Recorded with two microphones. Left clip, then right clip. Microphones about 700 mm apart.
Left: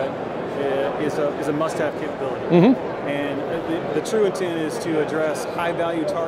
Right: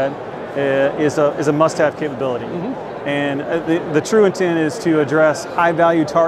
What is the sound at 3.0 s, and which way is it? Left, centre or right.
Speech, right.